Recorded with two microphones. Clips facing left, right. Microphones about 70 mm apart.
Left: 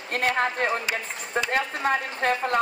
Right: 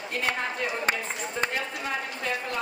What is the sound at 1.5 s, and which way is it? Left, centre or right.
Speech, left.